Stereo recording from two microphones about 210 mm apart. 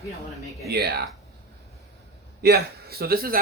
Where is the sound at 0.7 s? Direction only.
50° right (ahead or behind).